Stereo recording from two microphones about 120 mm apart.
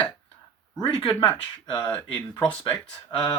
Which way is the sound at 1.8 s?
10° left (ahead or behind).